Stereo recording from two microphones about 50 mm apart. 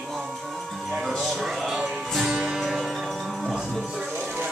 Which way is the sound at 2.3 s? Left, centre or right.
Centre.